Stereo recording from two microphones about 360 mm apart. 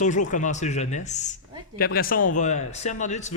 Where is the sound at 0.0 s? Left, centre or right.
Centre.